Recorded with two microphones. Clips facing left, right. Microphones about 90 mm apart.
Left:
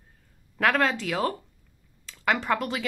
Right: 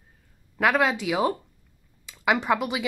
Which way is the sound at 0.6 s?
10° right (ahead or behind).